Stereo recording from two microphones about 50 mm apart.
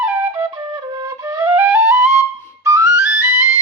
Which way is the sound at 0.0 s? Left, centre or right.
Right.